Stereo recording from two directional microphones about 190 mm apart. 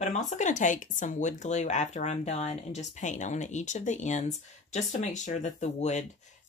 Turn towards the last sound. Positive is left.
turn(degrees=40)  # may be behind; listen again after turning